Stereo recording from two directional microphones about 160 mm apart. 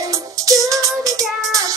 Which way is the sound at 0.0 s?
20° right (ahead or behind).